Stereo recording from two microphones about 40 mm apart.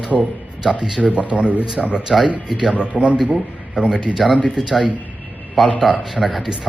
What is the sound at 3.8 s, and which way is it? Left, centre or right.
Speech, right.